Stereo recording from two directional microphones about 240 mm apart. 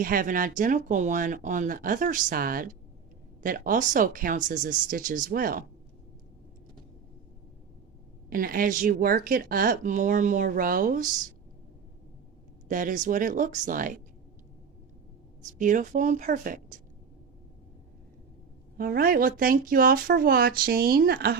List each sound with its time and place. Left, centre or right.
0.0 s speech: right
8.3 s speech: right
12.6 s speech: right
15.5 s speech: right
18.8 s speech: right